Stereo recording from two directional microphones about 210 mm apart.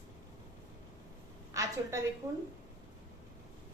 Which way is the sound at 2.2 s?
15° right (ahead or behind).